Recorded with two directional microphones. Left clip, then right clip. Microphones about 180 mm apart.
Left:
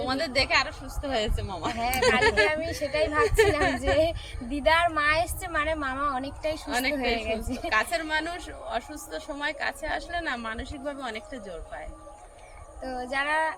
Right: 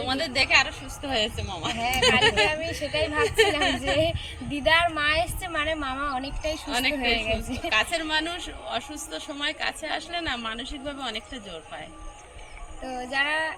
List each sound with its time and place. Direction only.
0.1 s a woman's voice: 25° left (ahead or behind)
1.8 s a woman's voice: 5° left (ahead or behind)
6.7 s a woman's voice: 25° left (ahead or behind)
6.9 s a woman's voice: 10° left (ahead or behind)
7.7 s a woman's voice: 25° left (ahead or behind)
12.8 s a woman's voice: 10° left (ahead or behind)